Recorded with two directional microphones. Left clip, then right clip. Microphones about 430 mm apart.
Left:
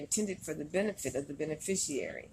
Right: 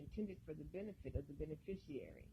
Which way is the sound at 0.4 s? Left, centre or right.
Centre.